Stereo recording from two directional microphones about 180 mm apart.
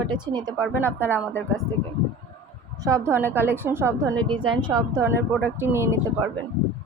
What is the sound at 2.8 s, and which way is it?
Speech, 15° right (ahead or behind).